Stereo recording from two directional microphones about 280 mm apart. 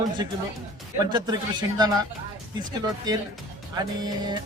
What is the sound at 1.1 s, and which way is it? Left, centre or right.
Speech, centre.